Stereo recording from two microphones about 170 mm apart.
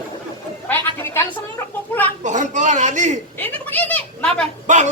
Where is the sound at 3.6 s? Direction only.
10° left (ahead or behind).